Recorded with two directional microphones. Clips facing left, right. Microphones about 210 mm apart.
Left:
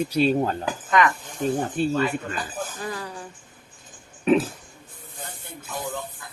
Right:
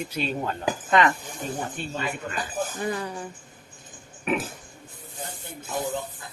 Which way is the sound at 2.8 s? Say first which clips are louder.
Right 3 dB; 20° right (ahead or behind).